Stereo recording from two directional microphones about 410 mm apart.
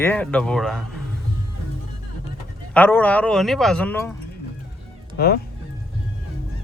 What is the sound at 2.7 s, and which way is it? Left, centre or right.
Speech, centre.